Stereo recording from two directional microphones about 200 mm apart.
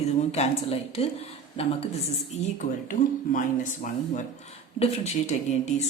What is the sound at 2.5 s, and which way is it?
A woman's voice, 40° left (ahead or behind).